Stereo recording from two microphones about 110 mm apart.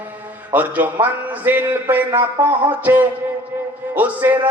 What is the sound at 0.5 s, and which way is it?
A man's voice, 15° right (ahead or behind).